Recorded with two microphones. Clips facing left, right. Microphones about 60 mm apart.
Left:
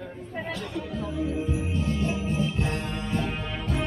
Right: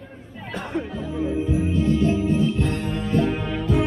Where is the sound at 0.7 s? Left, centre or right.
Right.